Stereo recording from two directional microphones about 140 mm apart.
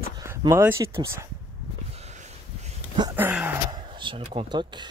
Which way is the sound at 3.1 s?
10° right (ahead or behind).